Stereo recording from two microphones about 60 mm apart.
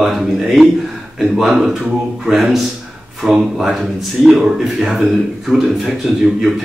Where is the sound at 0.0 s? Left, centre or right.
Centre.